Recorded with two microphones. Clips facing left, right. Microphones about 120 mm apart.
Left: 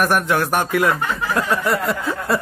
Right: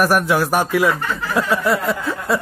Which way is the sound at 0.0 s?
5° right (ahead or behind).